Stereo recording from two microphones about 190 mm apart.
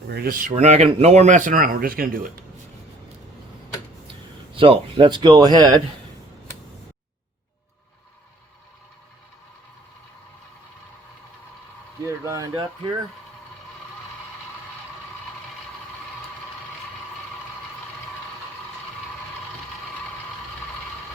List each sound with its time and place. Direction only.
0.1 s speech: 50° right (ahead or behind)
4.5 s speech: 30° right (ahead or behind)
12.0 s speech: 15° right (ahead or behind)